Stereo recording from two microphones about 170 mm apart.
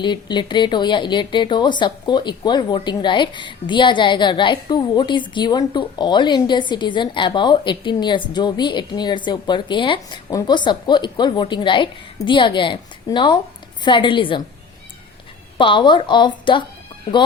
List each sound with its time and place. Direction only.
0.0 s a woman's voice: 25° left (ahead or behind)
15.5 s a woman's voice: 30° left (ahead or behind)